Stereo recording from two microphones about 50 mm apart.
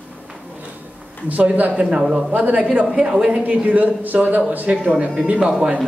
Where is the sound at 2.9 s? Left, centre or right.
Centre.